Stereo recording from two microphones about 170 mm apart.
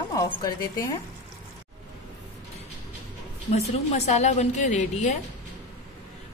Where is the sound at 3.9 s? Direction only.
40° left (ahead or behind).